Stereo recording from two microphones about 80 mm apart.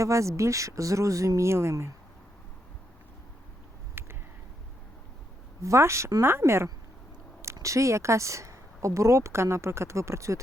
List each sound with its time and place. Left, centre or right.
0.0 s speech: right
4.0 s a sound: right
5.6 s speech: right
6.2 s speech: right